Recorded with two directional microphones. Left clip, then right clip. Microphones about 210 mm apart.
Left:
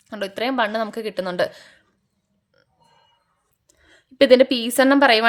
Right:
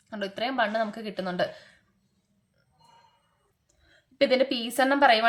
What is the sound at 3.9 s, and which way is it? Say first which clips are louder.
A woman's voice: left 10 dB; 55° left (ahead or behind).